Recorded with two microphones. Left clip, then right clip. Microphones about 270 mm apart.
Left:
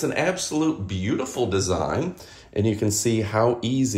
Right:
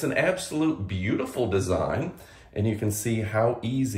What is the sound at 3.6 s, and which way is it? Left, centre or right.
Speech, left.